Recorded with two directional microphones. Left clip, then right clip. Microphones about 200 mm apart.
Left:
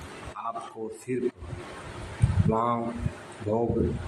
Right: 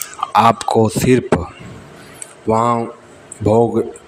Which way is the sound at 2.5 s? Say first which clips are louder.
Right 12 dB; 40° right (ahead or behind).